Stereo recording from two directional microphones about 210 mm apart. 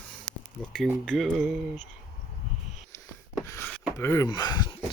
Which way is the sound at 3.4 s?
15° left (ahead or behind).